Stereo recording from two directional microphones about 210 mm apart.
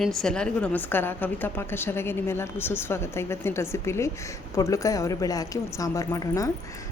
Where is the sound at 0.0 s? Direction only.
Centre (ahead or behind).